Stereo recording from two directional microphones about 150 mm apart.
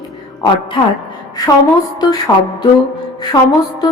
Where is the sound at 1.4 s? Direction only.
25° left (ahead or behind).